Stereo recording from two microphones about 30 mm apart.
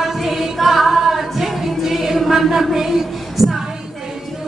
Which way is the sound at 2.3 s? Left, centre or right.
Centre.